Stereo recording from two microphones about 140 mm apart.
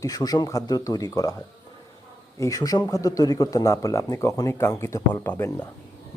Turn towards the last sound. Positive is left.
turn(degrees=15)  # may be behind; listen again after turning